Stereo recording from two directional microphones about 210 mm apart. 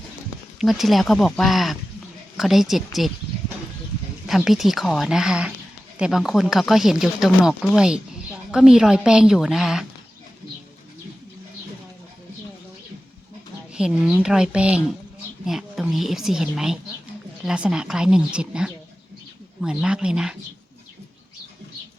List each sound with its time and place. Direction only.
0.6 s speech: centre (ahead or behind)
4.3 s speech: centre (ahead or behind)
13.7 s speech: 5° right (ahead or behind)